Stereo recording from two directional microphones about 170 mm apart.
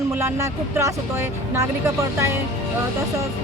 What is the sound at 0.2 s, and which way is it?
Speech, 15° right (ahead or behind).